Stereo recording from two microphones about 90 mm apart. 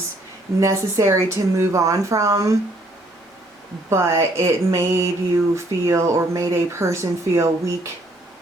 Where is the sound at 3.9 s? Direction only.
30° right (ahead or behind).